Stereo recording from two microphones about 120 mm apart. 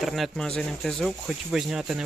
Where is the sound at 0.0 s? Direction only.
Centre (ahead or behind).